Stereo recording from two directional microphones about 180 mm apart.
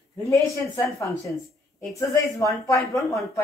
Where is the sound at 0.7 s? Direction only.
15° left (ahead or behind).